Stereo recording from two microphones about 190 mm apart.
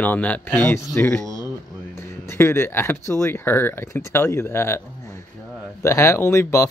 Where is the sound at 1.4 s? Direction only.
15° left (ahead or behind).